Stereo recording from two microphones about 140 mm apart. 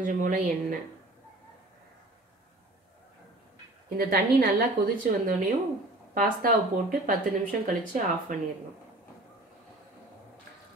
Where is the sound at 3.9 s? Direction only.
90° right.